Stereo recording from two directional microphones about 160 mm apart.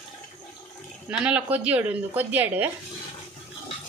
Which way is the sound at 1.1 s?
5° right (ahead or behind).